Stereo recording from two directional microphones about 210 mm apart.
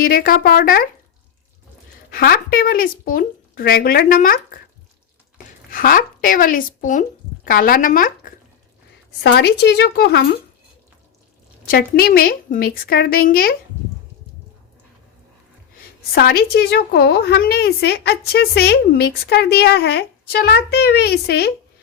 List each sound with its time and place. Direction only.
0.0 s a woman's voice: 45° left (ahead or behind)
2.0 s a woman's voice: 45° left (ahead or behind)
5.7 s speech: 40° left (ahead or behind)
9.2 s a woman's voice: 50° left (ahead or behind)
11.6 s a woman's voice: 45° left (ahead or behind)
16.1 s a woman's voice: 45° left (ahead or behind)